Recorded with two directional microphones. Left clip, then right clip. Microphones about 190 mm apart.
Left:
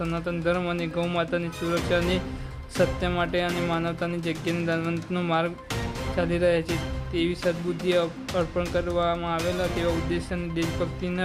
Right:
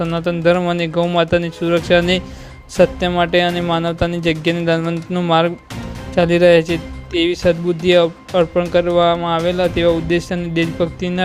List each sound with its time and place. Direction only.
0.0 s speech: 35° right (ahead or behind)